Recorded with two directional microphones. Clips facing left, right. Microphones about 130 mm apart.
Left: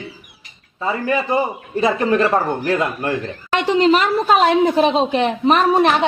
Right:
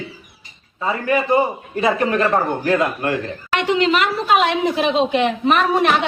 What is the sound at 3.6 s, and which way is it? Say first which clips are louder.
A man's voice: left 3 dB; 35° left (ahead or behind).